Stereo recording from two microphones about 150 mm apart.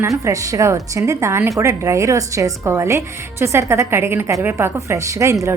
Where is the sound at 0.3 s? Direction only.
20° right (ahead or behind).